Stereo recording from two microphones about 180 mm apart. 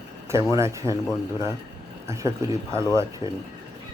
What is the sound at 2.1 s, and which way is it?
Speech, 15° right (ahead or behind).